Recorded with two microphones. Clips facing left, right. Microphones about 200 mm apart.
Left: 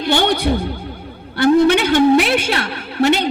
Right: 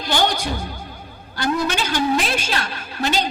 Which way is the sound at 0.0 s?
60° left (ahead or behind).